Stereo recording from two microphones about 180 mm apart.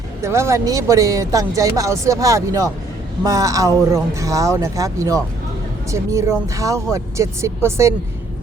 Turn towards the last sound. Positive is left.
turn(degrees=-15)  # may be behind; listen again after turning